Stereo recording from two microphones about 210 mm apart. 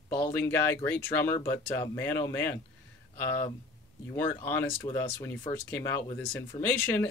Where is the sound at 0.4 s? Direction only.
10° left (ahead or behind).